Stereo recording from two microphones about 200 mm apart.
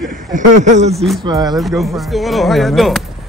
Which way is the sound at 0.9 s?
Centre (ahead or behind).